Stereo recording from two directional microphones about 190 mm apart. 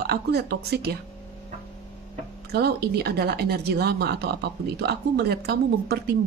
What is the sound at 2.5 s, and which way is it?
Speech, 55° right (ahead or behind).